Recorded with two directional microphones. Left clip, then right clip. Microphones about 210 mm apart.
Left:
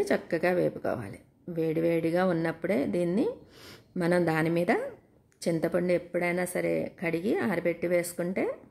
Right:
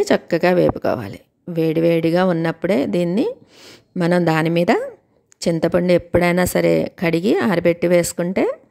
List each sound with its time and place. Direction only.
0.0 s speech: 40° right (ahead or behind)